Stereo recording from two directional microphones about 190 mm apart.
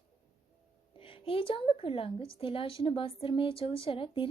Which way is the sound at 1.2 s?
25° left (ahead or behind).